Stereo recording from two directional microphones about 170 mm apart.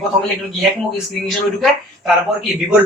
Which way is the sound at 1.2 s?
Centre (ahead or behind).